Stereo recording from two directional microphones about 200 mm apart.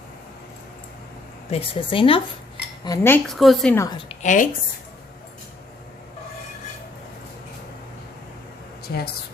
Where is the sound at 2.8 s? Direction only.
15° left (ahead or behind).